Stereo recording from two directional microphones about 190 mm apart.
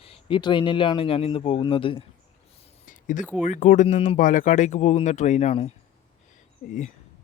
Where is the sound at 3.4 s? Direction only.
40° left (ahead or behind).